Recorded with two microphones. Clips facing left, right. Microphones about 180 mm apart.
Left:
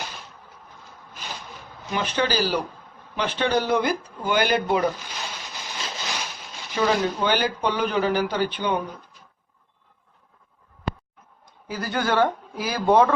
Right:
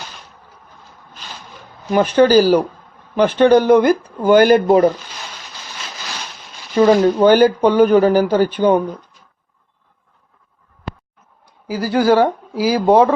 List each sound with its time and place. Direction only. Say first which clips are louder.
1.9 s speech: right 13 dB; 45° right (ahead or behind)
6.7 s speech: right 11 dB; 45° right (ahead or behind)
11.4 s speech: right 9 dB; 30° right (ahead or behind)